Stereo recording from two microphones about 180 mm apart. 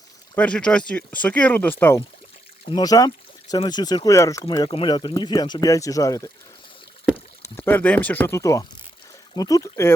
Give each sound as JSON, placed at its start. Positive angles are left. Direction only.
{"t": 0.3, "sound": "speech", "side_deg": 5}
{"t": 2.6, "sound": "speech", "side_deg": 20}
{"t": 7.5, "sound": "speech", "side_deg": 10}